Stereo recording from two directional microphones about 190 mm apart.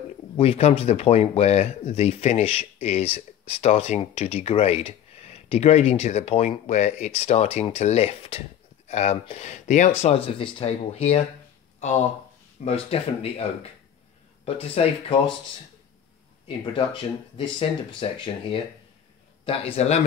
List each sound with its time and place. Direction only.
0.4 s speech: 30° left (ahead or behind)
12.6 s speech: 30° left (ahead or behind)
16.4 s speech: 25° left (ahead or behind)